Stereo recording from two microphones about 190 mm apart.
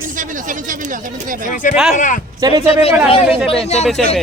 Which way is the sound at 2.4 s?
20° right (ahead or behind).